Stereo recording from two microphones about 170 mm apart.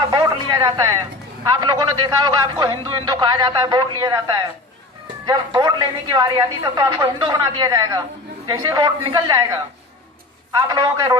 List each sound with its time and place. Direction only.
0.1 s a man's voice: 20° right (ahead or behind)
10.6 s a man's voice: 25° right (ahead or behind)